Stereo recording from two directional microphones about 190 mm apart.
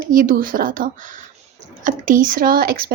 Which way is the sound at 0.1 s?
45° right (ahead or behind).